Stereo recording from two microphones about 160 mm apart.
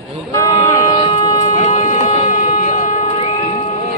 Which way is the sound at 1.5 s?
50° left (ahead or behind).